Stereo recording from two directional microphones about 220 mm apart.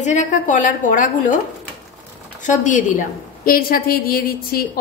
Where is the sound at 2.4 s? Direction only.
35° left (ahead or behind).